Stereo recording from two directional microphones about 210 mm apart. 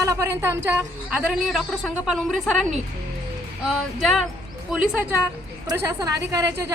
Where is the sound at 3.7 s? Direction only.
Centre (ahead or behind).